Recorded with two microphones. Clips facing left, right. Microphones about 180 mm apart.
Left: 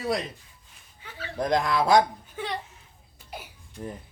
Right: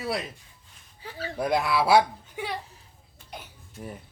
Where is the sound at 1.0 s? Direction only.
35° right (ahead or behind).